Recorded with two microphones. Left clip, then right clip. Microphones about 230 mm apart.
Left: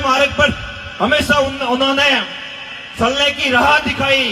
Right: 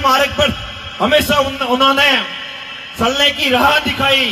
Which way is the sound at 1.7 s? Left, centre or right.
Right.